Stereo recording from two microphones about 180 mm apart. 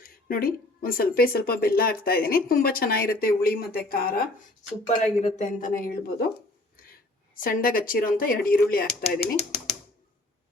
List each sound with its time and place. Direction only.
0.0 s speech: 55° left (ahead or behind)
4.9 s speech: 40° left (ahead or behind)
7.4 s speech: 50° left (ahead or behind)